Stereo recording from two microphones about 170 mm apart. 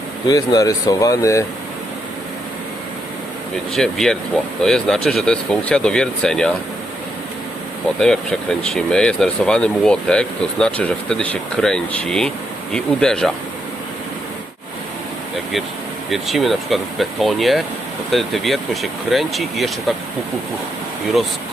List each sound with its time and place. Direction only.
0.3 s speech: 20° left (ahead or behind)
3.8 s speech: 5° left (ahead or behind)
7.9 s speech: 5° left (ahead or behind)
16.0 s speech: centre (ahead or behind)